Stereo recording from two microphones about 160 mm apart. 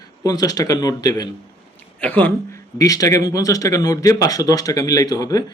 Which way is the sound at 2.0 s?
10° left (ahead or behind).